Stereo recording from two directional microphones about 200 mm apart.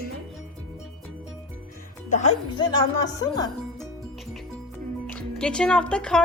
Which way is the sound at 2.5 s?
20° left (ahead or behind).